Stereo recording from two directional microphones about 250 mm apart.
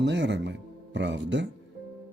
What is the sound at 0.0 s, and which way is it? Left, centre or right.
Speech, right.